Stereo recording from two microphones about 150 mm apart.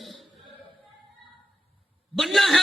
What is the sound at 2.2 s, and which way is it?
Speech, centre (ahead or behind).